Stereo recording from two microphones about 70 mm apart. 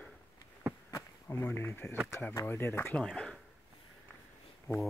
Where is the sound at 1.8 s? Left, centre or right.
Centre.